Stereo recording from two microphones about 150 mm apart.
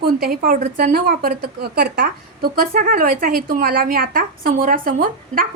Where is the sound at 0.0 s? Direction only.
80° right.